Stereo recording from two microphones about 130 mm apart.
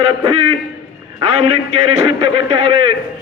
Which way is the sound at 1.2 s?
45° right (ahead or behind).